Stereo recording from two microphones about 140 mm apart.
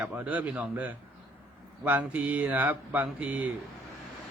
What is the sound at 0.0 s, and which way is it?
Speech, 10° right (ahead or behind).